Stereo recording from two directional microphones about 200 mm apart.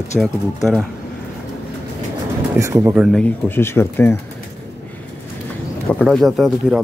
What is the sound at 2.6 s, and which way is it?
Speech, 15° right (ahead or behind).